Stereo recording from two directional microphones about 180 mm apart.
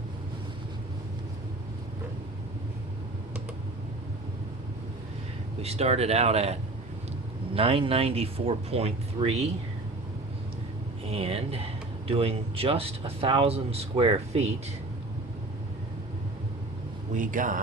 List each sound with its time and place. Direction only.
5.6 s speech: 35° right (ahead or behind)
11.1 s speech: 35° right (ahead or behind)
17.2 s speech: 45° right (ahead or behind)